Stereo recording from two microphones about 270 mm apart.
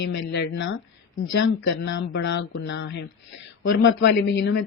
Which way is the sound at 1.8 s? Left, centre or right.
Left.